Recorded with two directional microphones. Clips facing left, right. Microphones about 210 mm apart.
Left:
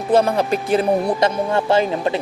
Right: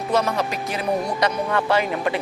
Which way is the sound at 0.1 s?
30° left (ahead or behind).